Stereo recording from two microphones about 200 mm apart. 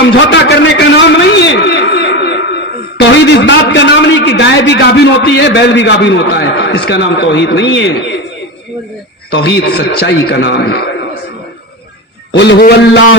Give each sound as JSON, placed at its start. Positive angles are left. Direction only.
{"t": 0.0, "sound": "a man's voice", "side_deg": 65}
{"t": 9.3, "sound": "a man's voice", "side_deg": 55}
{"t": 12.4, "sound": "a man's voice", "side_deg": 55}